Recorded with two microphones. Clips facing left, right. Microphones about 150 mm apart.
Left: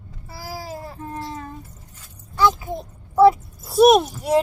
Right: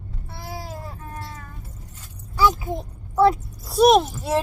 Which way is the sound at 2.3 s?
10° right (ahead or behind).